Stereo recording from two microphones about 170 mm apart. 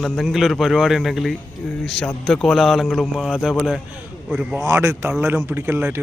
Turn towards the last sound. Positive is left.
turn(degrees=-10)  # may be behind; listen again after turning